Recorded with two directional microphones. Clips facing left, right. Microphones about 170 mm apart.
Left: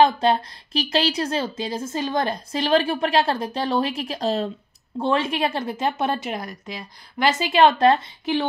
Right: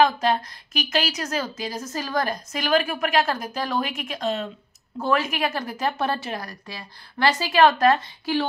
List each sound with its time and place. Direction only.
0.0 s a woman's voice: 30° left (ahead or behind)